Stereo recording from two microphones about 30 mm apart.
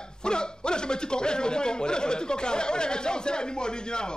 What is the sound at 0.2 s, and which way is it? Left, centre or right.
A man's voice, left.